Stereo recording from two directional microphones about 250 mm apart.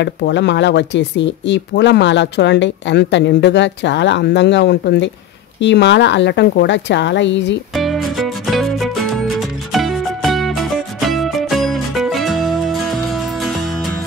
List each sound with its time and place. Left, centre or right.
0.0 s speech: left
7.7 s music: centre